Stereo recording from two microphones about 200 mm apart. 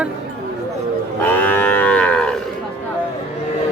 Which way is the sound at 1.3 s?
10° left (ahead or behind).